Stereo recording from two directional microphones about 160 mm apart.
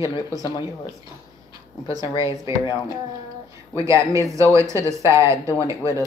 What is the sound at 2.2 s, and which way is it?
Speech, 20° right (ahead or behind).